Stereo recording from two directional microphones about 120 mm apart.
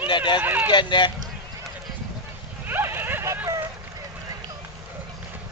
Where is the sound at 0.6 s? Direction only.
40° left (ahead or behind).